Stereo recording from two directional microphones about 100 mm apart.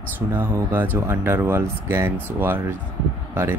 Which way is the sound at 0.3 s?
25° right (ahead or behind).